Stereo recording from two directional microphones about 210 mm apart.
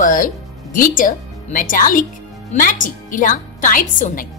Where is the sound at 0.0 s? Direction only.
40° left (ahead or behind).